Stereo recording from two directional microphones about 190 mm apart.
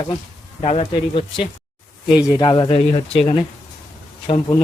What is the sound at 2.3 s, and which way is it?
Speech, 20° left (ahead or behind).